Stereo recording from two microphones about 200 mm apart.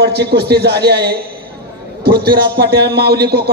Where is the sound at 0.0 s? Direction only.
55° right (ahead or behind).